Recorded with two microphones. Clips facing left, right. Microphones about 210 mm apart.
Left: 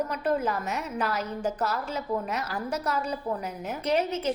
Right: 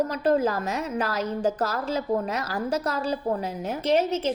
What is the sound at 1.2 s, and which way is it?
Speech, 90° right.